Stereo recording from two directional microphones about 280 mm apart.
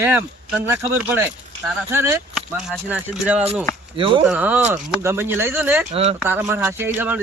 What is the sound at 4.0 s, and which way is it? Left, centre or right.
Speech, centre.